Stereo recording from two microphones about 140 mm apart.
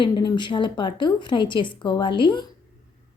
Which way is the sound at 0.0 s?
30° left (ahead or behind).